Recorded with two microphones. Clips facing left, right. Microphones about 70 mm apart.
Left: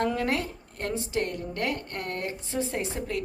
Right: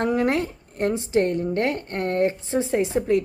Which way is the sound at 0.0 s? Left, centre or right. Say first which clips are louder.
Right 5 dB; right.